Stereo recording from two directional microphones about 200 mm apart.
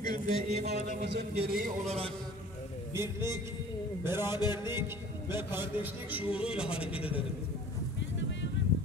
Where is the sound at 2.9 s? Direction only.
15° right (ahead or behind).